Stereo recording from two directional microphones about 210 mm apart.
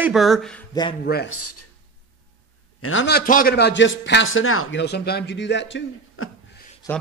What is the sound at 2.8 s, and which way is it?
Speech, 65° left (ahead or behind).